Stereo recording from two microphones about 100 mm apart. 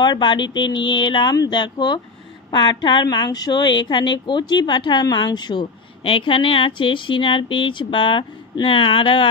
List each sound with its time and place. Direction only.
0.0 s a woman's voice: 50° left (ahead or behind)